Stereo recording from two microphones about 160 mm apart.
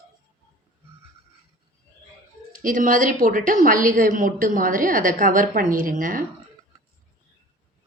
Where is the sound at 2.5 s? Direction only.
55° right (ahead or behind).